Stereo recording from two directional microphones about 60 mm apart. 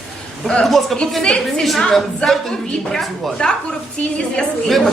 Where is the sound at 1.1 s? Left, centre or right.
Centre.